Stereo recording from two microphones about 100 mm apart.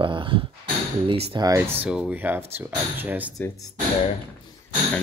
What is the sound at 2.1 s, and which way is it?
Speech, 20° right (ahead or behind).